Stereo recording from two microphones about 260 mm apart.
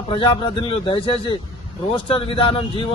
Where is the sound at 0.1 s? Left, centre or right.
Centre.